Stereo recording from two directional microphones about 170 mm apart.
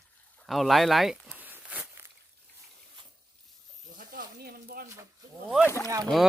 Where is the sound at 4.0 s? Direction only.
60° right (ahead or behind).